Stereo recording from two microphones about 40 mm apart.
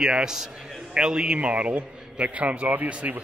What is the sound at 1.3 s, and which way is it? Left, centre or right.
A man's voice, right.